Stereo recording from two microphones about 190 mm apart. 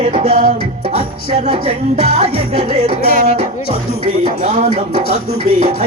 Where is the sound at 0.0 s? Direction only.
30° right (ahead or behind).